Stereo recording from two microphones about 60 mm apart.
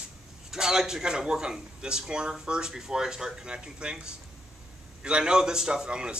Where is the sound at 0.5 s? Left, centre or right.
Centre.